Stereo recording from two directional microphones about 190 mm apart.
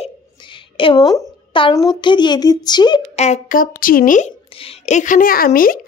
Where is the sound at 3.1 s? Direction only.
35° left (ahead or behind).